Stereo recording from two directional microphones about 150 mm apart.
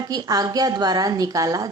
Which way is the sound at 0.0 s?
25° right (ahead or behind).